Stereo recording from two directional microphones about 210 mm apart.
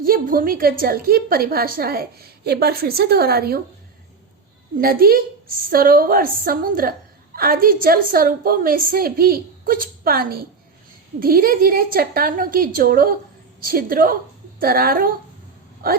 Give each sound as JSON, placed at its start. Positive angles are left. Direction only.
{"t": 0.0, "sound": "a woman's voice", "side_deg": -45}
{"t": 4.8, "sound": "a woman's voice", "side_deg": -45}